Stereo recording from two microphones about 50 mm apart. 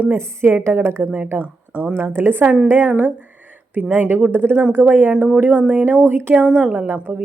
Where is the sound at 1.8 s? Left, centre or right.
Right.